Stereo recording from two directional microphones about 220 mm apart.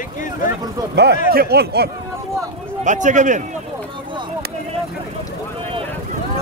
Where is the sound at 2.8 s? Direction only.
35° right (ahead or behind).